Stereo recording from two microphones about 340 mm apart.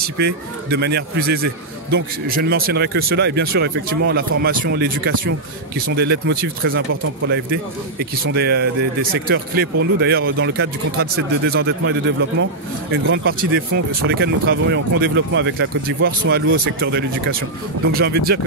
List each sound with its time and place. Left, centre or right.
0.0 s a man's voice: right